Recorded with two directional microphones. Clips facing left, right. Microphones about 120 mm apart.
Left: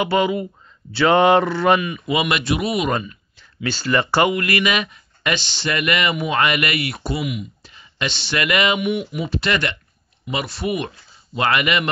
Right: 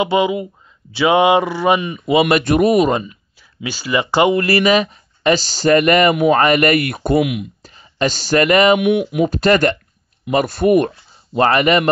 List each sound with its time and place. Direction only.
0.0 s a sound: 15° right (ahead or behind)
1.8 s speech: 30° right (ahead or behind); by 2.9 s 45° right (ahead or behind)
3.1 s speech: 10° right (ahead or behind)
4.3 s speech: 35° right (ahead or behind); by 7.4 s 60° right (ahead or behind)
7.6 s speech: 40° right (ahead or behind)
8.7 s speech: 60° right (ahead or behind)
11.3 s speech: 35° right (ahead or behind)